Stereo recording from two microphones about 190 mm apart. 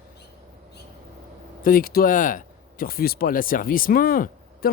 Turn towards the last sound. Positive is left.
turn(degrees=50)  # may be behind; listen again after turning